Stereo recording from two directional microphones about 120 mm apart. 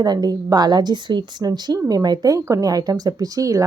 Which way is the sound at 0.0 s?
35° right (ahead or behind).